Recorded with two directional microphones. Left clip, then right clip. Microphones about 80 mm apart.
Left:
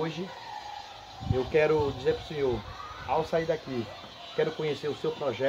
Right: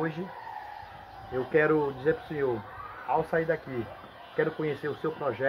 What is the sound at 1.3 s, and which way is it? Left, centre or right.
Speech, centre.